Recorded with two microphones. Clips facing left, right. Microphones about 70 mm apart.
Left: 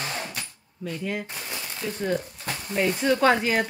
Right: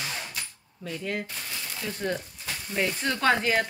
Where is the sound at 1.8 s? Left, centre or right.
Centre.